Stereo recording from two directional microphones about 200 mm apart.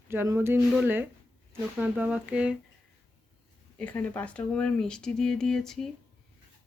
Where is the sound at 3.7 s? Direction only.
5° left (ahead or behind).